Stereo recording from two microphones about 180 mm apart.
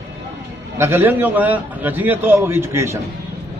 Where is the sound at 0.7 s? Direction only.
15° right (ahead or behind).